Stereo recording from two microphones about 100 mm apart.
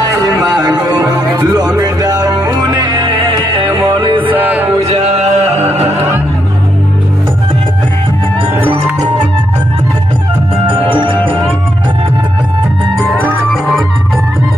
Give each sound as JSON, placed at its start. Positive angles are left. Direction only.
{"t": 0.6, "sound": "music", "side_deg": -45}
{"t": 4.3, "sound": "music", "side_deg": -15}
{"t": 4.8, "sound": "music", "side_deg": -90}
{"t": 10.7, "sound": "music", "side_deg": -60}